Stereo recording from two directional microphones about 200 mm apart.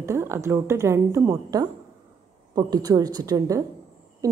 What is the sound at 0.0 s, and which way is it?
A woman's voice, 15° right (ahead or behind).